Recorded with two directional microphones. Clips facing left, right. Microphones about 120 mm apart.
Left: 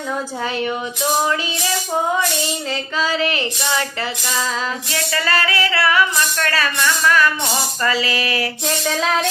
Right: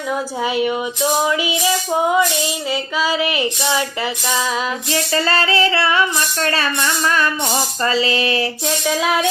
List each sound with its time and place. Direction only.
0.4 s female singing: 15° right (ahead or behind)
2.6 s female singing: 10° right (ahead or behind)
4.9 s music: 30° right (ahead or behind)
8.6 s female singing: 10° right (ahead or behind)